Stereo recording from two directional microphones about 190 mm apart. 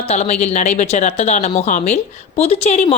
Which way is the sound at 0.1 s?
35° left (ahead or behind).